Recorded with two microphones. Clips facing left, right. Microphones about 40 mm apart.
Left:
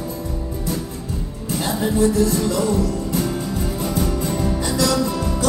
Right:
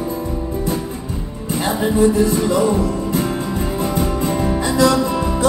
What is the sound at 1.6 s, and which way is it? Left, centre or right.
Music, right.